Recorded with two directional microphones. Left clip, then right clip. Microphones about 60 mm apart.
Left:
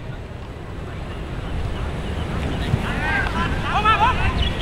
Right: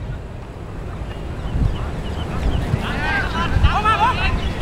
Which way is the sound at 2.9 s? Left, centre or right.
Right.